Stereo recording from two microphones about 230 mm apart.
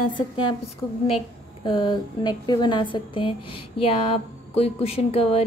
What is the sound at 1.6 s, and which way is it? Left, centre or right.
A woman's voice, centre.